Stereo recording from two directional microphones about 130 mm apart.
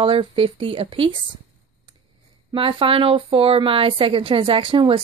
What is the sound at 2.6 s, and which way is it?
Speech, 45° right (ahead or behind).